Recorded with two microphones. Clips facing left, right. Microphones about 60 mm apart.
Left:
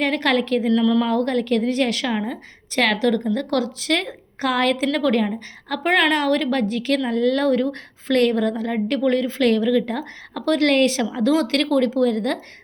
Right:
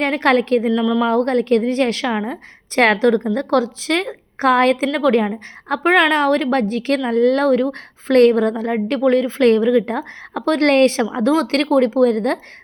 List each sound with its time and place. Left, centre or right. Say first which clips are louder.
0.0 s a woman's voice: right 4 dB; right
0.7 s speech: even; centre
1.0 s a woman's voice: right 4 dB; right
2.0 s a woman's voice: right 3 dB; centre
2.7 s a woman's voice: right 5 dB; right
4.9 s a woman's voice: right 3 dB; centre; by 12.4 s right